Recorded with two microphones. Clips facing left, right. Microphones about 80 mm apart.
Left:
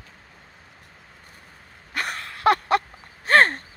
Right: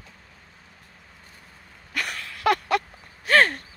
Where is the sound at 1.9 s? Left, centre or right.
Left.